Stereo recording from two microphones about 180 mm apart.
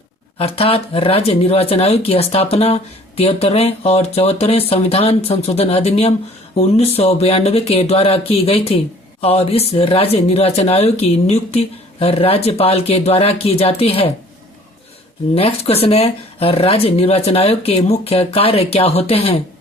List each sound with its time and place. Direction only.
0.3 s speech: 35° left (ahead or behind)
15.4 s speech: 35° left (ahead or behind)